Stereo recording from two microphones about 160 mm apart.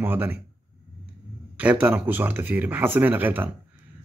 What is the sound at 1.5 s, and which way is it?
A man's voice, 10° right (ahead or behind).